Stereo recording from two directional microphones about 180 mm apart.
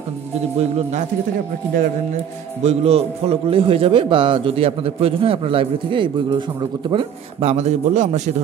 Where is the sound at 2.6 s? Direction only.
35° right (ahead or behind).